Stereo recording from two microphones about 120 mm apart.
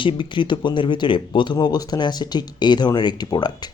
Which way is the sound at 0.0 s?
45° left (ahead or behind).